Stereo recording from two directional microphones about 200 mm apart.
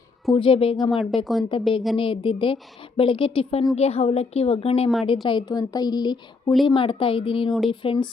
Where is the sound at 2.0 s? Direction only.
25° left (ahead or behind).